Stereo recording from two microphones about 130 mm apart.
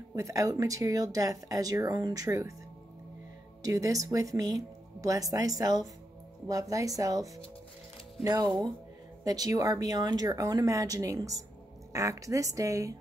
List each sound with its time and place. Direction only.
0.1 s speech: 25° right (ahead or behind)
3.6 s speech: 25° right (ahead or behind)